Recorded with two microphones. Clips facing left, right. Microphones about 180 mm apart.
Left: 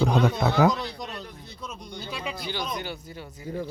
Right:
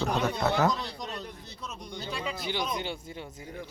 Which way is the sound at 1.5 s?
Centre (ahead or behind).